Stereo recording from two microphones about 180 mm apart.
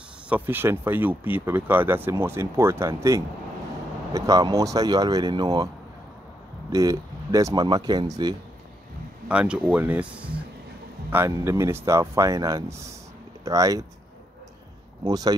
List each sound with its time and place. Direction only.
0.3 s speech: 10° right (ahead or behind)
6.7 s speech: 20° right (ahead or behind)
9.3 s speech: 5° right (ahead or behind)
15.0 s speech: 20° right (ahead or behind)